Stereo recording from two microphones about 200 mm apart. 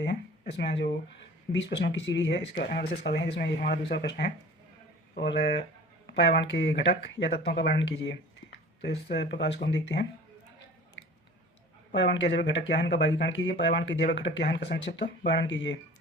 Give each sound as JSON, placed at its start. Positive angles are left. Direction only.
{"t": 0.0, "sound": "speech", "side_deg": 60}
{"t": 11.9, "sound": "speech", "side_deg": 60}